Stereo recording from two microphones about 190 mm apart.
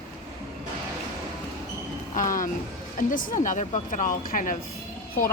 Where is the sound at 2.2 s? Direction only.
45° left (ahead or behind).